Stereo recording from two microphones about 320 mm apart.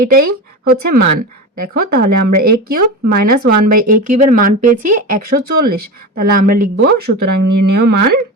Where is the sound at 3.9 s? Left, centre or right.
Right.